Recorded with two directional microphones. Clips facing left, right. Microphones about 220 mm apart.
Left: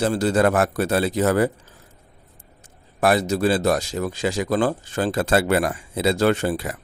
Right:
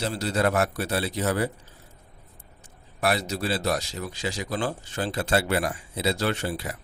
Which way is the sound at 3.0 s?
50° left (ahead or behind).